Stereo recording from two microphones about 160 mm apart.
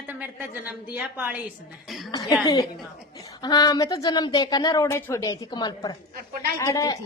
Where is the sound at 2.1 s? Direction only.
25° left (ahead or behind).